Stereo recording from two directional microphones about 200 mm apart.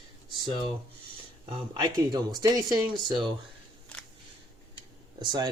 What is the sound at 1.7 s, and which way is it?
Speech, 20° right (ahead or behind).